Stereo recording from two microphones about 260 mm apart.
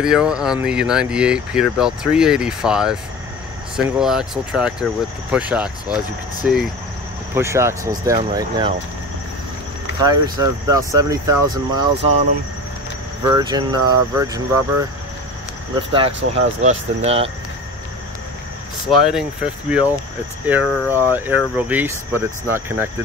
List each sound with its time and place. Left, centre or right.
0.0 s speech: centre
10.0 s speech: centre
13.2 s speech: centre
15.7 s speech: centre
18.9 s speech: centre